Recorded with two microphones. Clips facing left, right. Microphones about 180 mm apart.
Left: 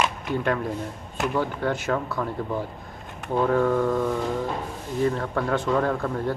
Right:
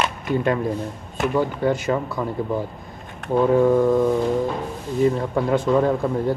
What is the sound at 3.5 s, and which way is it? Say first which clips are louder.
Speech: right 6 dB; 15° right (ahead or behind).